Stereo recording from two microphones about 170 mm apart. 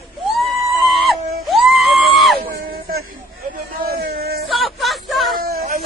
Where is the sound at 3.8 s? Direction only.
65° right (ahead or behind).